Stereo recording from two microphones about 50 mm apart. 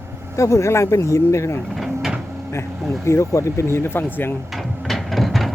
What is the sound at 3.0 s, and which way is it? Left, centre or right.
Speech, left.